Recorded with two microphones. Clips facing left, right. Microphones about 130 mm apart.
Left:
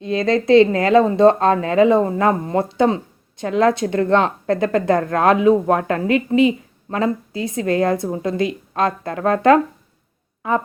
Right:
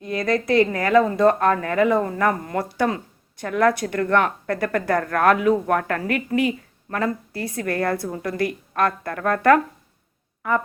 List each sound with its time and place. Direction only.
0.0 s speech: 25° left (ahead or behind)